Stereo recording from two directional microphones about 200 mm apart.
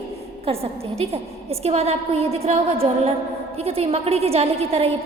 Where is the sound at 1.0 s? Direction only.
30° right (ahead or behind).